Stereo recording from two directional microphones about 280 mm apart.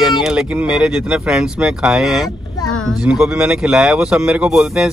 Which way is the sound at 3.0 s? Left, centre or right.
Centre.